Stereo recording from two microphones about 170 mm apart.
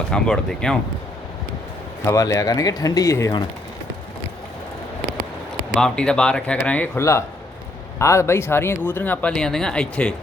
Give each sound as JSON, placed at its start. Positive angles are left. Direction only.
{"t": 0.1, "sound": "speech", "side_deg": 5}
{"t": 2.0, "sound": "speech", "side_deg": 20}
{"t": 5.7, "sound": "speech", "side_deg": 5}